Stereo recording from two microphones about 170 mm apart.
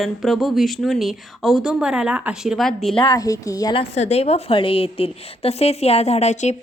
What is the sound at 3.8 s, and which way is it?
A woman's voice, 40° left (ahead or behind).